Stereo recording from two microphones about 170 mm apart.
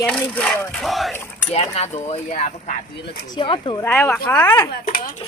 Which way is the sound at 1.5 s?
35° left (ahead or behind).